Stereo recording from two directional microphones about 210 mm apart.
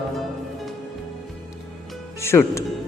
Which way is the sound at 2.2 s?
10° left (ahead or behind).